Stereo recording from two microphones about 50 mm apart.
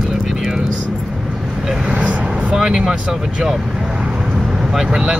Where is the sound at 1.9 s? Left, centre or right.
Right.